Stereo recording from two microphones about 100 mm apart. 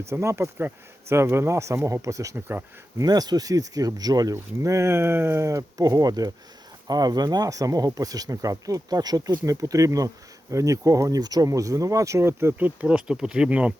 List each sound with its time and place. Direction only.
0.1 s speech: 25° right (ahead or behind); by 13.7 s 10° right (ahead or behind)